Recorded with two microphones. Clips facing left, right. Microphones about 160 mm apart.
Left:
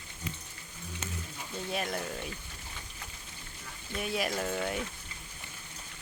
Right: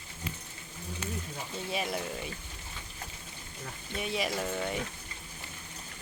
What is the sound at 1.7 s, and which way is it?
Speech, centre (ahead or behind).